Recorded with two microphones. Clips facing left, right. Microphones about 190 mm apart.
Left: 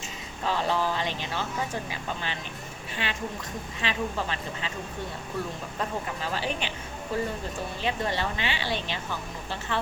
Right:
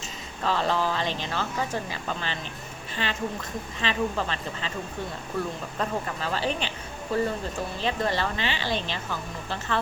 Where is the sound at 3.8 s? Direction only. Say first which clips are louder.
Right 3 dB; 10° left (ahead or behind).